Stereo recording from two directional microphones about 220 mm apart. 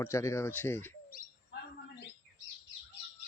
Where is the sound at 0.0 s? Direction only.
15° left (ahead or behind).